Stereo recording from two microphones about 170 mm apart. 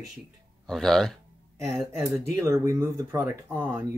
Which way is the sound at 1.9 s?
15° right (ahead or behind).